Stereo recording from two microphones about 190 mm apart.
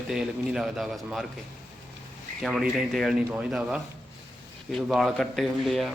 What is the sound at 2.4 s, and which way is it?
Speech, centre (ahead or behind).